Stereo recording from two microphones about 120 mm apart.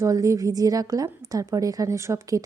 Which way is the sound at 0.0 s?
30° right (ahead or behind).